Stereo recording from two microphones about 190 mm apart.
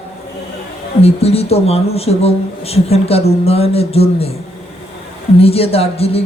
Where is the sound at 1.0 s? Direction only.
30° left (ahead or behind).